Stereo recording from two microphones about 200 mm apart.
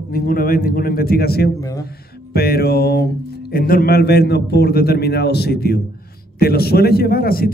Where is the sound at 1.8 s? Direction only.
50° left (ahead or behind).